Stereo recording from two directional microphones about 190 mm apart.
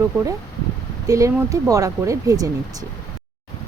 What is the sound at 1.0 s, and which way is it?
Speech, 15° right (ahead or behind).